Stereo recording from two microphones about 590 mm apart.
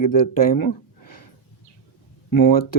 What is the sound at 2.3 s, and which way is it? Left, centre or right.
Speech, left.